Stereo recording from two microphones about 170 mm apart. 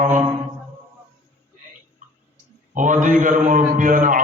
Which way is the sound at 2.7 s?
50° right (ahead or behind).